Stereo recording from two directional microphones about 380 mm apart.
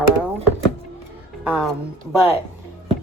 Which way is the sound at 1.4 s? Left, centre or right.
Centre.